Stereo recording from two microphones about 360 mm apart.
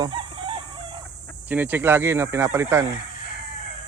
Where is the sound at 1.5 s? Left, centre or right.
Centre.